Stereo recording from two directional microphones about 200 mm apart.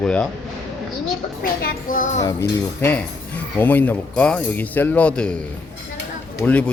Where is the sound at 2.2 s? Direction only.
15° left (ahead or behind).